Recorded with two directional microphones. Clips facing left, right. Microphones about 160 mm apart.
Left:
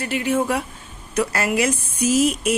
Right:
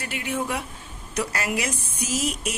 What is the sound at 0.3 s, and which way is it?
Speech, 55° left (ahead or behind).